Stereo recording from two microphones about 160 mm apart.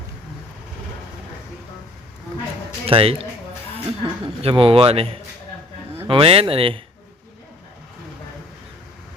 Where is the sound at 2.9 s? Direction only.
35° right (ahead or behind).